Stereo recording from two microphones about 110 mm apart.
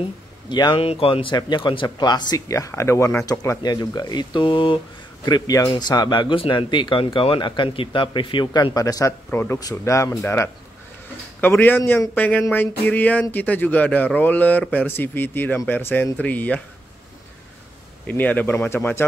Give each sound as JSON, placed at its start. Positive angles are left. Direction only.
{"t": 0.5, "sound": "speech", "side_deg": 40}
{"t": 0.7, "sound": "speech", "side_deg": 60}
{"t": 3.3, "sound": "speech", "side_deg": 35}
{"t": 5.2, "sound": "speech", "side_deg": 40}
{"t": 8.7, "sound": "speech", "side_deg": 30}
{"t": 9.3, "sound": "speech", "side_deg": 20}
{"t": 9.6, "sound": "speech", "side_deg": 30}
{"t": 18.0, "sound": "speech", "side_deg": 15}